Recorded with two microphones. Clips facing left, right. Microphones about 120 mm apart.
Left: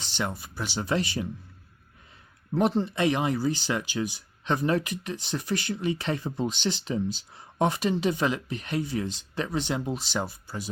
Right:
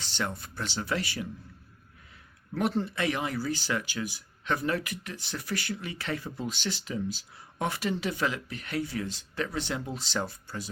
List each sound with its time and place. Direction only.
0.0 s speech: 15° left (ahead or behind)
0.8 s speech: 20° left (ahead or behind)
2.6 s speech: 20° left (ahead or behind)